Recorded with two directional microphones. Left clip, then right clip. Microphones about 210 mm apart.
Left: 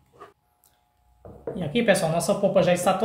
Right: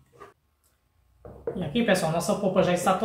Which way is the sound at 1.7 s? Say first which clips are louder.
Left 3 dB; 40° left (ahead or behind).